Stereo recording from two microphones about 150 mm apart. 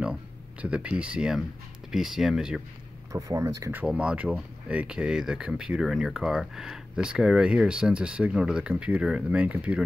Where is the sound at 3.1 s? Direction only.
25° right (ahead or behind).